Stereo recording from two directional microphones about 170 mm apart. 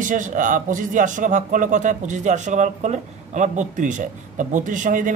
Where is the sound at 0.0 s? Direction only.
50° right (ahead or behind).